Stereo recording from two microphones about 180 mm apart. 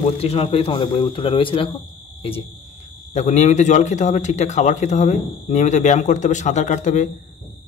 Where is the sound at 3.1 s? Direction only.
40° left (ahead or behind).